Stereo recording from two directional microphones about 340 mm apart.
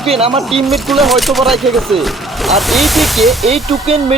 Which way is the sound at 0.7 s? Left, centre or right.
Centre.